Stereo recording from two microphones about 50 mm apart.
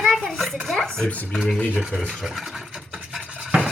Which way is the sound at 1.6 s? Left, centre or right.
Left.